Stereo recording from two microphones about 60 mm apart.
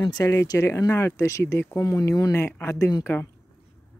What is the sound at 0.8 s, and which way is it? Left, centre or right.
Speech, left.